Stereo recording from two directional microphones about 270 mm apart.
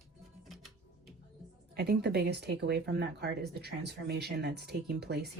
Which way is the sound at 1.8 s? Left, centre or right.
Right.